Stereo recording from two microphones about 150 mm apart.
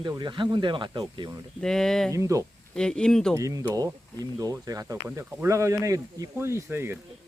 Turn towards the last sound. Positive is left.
turn(degrees=-15)  # may be behind; listen again after turning